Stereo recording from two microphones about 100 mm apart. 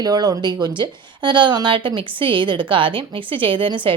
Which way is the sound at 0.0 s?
40° right (ahead or behind).